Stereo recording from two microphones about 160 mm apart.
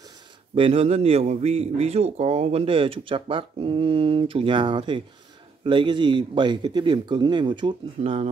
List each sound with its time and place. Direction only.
0.6 s speech: 35° right (ahead or behind)